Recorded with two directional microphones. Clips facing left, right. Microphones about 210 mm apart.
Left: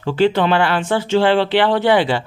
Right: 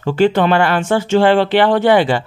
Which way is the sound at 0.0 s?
45° right (ahead or behind).